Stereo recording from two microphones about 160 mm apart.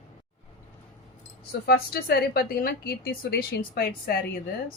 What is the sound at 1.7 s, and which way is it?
Speech, 80° left.